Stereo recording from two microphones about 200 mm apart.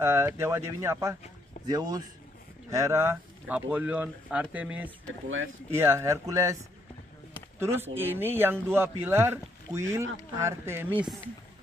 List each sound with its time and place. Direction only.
0.0 s speech: 10° right (ahead or behind)
7.5 s speech: 10° right (ahead or behind)